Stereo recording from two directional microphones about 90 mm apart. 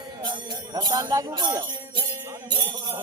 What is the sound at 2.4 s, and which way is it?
Music, 50° right (ahead or behind).